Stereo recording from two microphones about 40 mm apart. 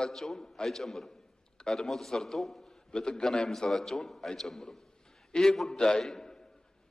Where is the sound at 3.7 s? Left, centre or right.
Centre.